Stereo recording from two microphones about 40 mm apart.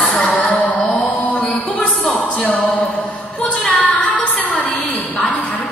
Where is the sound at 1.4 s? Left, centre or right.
Centre.